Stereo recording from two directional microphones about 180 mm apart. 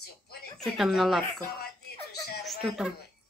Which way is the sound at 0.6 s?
Centre (ahead or behind).